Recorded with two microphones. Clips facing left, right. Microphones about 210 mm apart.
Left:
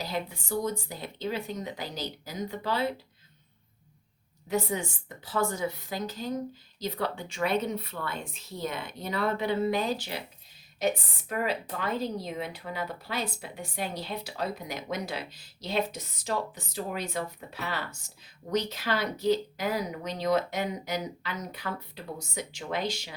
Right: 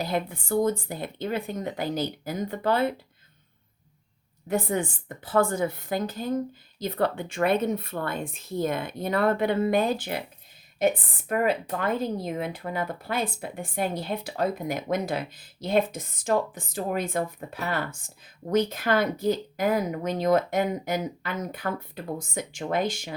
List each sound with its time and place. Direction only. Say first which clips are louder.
0.0 s a woman's voice: right 5 dB; 55° right (ahead or behind)
4.4 s a woman's voice: right 3 dB; 55° right (ahead or behind)